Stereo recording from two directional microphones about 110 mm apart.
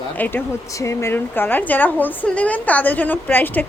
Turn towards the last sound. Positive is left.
turn(degrees=15)  # may be behind; listen again after turning